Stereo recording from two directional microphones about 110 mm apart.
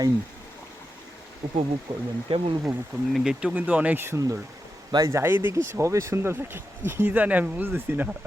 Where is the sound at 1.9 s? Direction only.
55° right (ahead or behind).